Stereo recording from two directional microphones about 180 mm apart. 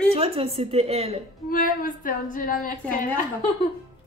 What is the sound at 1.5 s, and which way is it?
A woman's voice, 50° left (ahead or behind).